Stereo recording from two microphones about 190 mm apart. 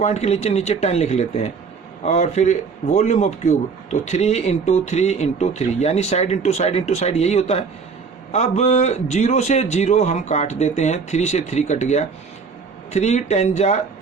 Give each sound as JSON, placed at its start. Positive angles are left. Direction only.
{"t": 0.0, "sound": "a man's voice", "side_deg": 35}